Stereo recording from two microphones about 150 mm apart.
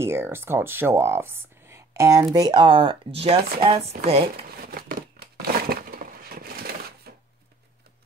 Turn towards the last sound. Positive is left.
turn(degrees=-90)